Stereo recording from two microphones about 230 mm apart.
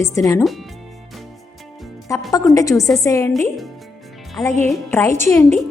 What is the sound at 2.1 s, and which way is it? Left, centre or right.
A woman's voice, centre.